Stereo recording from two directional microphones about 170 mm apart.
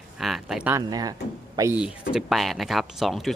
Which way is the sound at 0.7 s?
20° right (ahead or behind).